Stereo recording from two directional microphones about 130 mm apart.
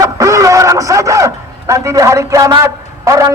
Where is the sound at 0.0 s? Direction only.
25° right (ahead or behind).